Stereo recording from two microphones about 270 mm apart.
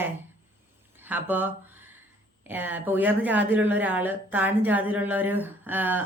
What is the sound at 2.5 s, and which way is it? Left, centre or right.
Speech, centre.